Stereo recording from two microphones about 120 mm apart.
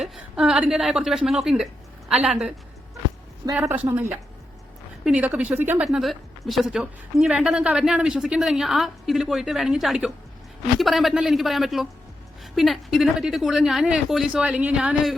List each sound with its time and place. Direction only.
0.1 s a woman's voice: 5° right (ahead or behind)
3.5 s speech: 20° right (ahead or behind)
5.8 s a woman's voice: 5° right (ahead or behind)